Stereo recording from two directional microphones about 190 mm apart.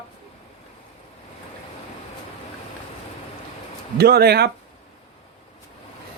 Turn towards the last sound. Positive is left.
turn(degrees=-55)  # may be behind; listen again after turning